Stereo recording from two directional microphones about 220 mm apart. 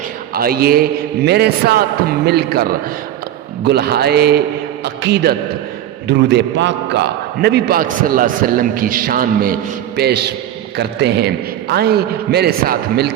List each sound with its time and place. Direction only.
0.3 s a man's voice: 45° right (ahead or behind)